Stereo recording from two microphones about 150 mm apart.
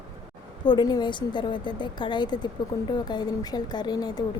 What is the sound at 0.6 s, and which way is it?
A woman's voice, 30° left (ahead or behind).